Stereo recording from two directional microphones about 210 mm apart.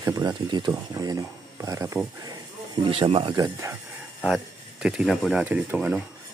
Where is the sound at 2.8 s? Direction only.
25° right (ahead or behind).